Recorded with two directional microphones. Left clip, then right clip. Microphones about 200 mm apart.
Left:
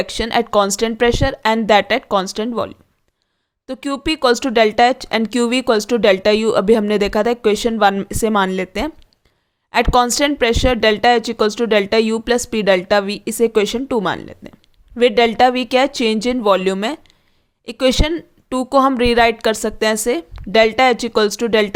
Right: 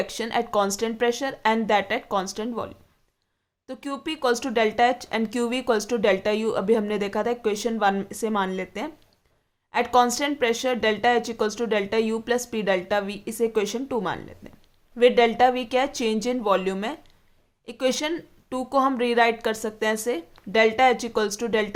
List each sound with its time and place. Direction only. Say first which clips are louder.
0.0 s speech: left 8 dB; 35° left (ahead or behind)